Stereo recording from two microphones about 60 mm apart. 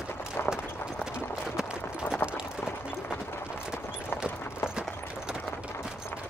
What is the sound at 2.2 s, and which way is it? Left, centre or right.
Run, left.